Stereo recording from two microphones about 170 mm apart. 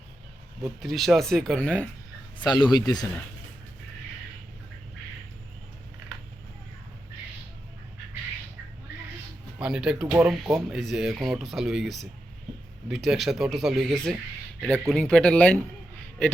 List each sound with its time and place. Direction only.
0.6 s speech: centre (ahead or behind)
2.4 s speech: 25° left (ahead or behind)
9.6 s speech: 5° right (ahead or behind)